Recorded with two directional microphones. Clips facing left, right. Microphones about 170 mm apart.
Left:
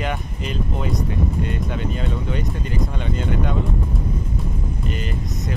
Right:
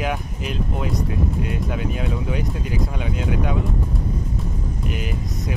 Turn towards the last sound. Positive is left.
turn(degrees=-5)  # may be behind; listen again after turning